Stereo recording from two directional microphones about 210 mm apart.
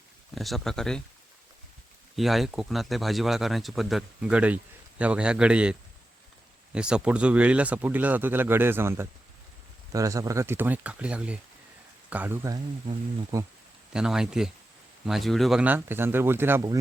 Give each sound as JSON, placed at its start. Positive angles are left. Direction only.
{"t": 0.3, "sound": "speech", "side_deg": 0}
{"t": 2.1, "sound": "speech", "side_deg": 0}
{"t": 6.7, "sound": "speech", "side_deg": -5}
{"t": 13.9, "sound": "speech", "side_deg": -5}